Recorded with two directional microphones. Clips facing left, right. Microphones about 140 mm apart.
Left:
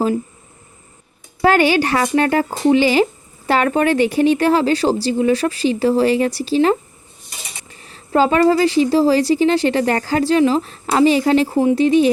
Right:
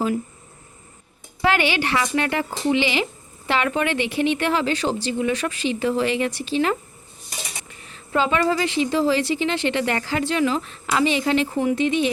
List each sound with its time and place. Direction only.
1.4 s speech: 40° left (ahead or behind)